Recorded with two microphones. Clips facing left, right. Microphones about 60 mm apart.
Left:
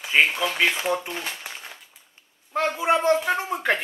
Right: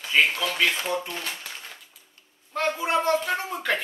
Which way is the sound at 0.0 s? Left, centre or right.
Centre.